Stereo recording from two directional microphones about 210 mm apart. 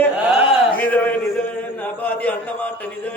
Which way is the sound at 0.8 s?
10° left (ahead or behind).